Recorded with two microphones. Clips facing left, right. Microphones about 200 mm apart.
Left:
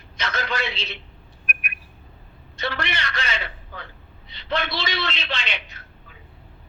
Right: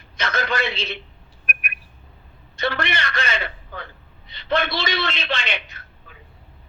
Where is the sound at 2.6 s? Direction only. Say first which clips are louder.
Right 4 dB; 50° right (ahead or behind).